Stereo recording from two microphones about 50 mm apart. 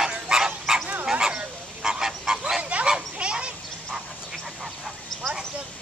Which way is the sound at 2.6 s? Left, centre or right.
Right.